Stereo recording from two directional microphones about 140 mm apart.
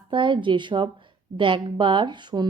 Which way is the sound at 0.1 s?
35° right (ahead or behind).